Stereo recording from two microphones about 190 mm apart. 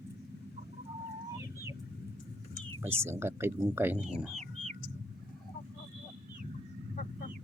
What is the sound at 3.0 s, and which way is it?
Speech, 15° right (ahead or behind).